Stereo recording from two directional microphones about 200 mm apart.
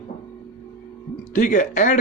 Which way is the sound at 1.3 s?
40° left (ahead or behind).